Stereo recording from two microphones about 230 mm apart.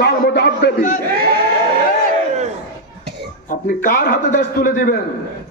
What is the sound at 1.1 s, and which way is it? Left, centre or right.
Speech, right.